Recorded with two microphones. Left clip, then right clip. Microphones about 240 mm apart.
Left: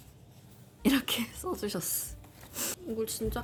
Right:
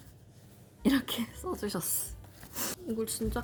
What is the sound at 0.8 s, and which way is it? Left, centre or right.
A woman's voice, centre.